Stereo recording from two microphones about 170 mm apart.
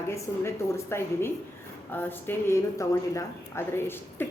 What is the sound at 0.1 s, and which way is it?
Speech, 15° left (ahead or behind).